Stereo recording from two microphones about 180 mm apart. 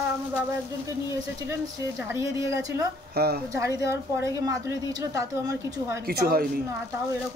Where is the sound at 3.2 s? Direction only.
60° right (ahead or behind).